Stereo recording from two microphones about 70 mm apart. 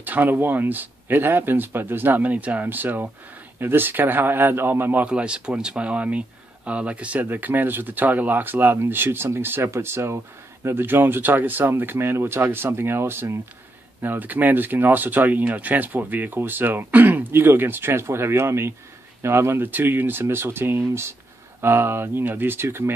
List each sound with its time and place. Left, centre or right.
0.0 s speech: right
5.0 s speech: centre; by 22.9 s right